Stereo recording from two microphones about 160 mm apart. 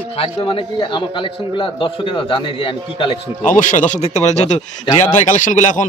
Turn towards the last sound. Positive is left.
turn(degrees=50)  # may be behind; listen again after turning